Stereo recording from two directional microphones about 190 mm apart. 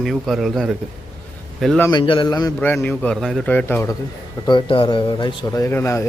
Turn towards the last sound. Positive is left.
turn(degrees=15)  # may be behind; listen again after turning